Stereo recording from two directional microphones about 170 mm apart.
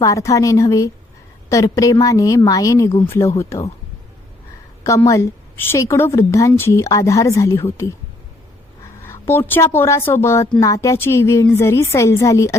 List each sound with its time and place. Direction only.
0.0 s a woman's voice: 20° left (ahead or behind)
4.9 s a woman's voice: 20° left (ahead or behind)
9.0 s a sound: 15° left (ahead or behind)
9.7 s a woman's voice: 15° left (ahead or behind)